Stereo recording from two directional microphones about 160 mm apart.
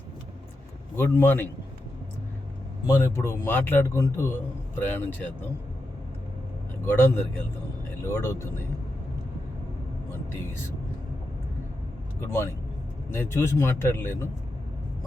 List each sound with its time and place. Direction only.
0.9 s a man's voice: 10° left (ahead or behind)
2.8 s a man's voice: 20° left (ahead or behind)
6.8 s a man's voice: 15° left (ahead or behind)
13.1 s a man's voice: 15° left (ahead or behind)